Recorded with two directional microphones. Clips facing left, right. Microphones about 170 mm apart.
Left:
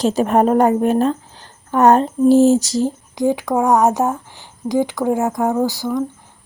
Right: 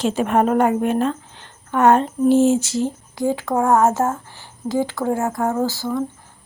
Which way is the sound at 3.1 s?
15° left (ahead or behind).